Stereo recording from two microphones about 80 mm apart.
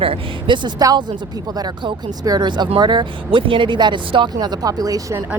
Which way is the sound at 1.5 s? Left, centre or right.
Right.